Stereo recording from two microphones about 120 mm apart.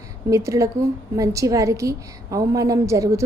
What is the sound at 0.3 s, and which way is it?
A woman's voice, 25° right (ahead or behind).